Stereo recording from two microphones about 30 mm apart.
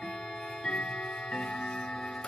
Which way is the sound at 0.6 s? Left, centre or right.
Centre.